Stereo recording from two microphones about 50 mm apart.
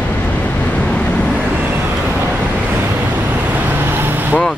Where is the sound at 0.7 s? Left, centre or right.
Left.